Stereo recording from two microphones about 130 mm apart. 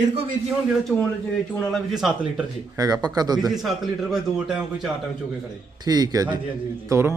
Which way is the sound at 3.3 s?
Centre (ahead or behind).